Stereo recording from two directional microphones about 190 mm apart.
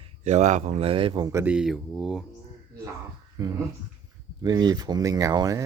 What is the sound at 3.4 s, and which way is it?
Speech, 20° right (ahead or behind).